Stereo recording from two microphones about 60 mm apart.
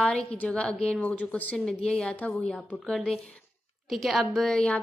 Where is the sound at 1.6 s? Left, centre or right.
Centre.